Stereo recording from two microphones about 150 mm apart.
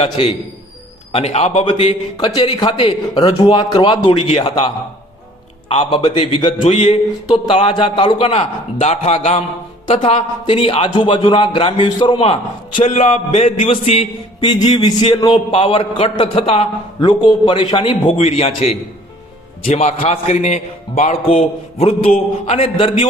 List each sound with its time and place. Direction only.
0.0 s a man's voice: 40° left (ahead or behind)
2.1 s a man's voice: 25° left (ahead or behind)
14.6 s a man's voice: 30° left (ahead or behind); by 21.2 s 50° left (ahead or behind)
22.4 s a man's voice: 45° left (ahead or behind)